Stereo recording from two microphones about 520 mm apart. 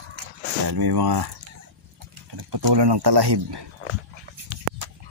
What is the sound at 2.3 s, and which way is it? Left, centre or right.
Speech, right.